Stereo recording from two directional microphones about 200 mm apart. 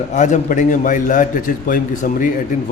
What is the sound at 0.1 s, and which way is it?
A man's voice, 35° left (ahead or behind).